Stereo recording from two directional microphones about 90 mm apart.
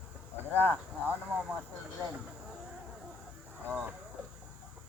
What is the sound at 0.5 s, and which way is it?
Speech, 20° left (ahead or behind).